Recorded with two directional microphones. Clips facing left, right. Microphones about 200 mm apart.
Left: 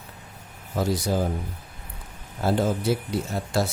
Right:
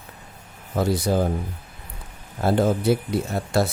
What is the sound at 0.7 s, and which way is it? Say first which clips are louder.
Speech: right 3 dB; 60° right (ahead or behind).